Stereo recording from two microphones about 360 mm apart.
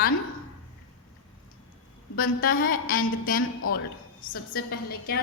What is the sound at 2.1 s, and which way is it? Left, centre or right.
A woman's voice, left.